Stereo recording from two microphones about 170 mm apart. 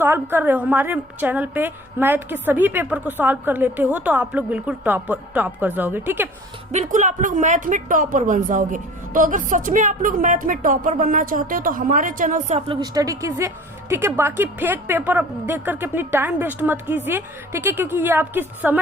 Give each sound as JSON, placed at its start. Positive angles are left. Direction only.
{"t": 0.0, "sound": "a woman's voice", "side_deg": -15}
{"t": 6.7, "sound": "a woman's voice", "side_deg": -45}
{"t": 12.5, "sound": "a woman's voice", "side_deg": -30}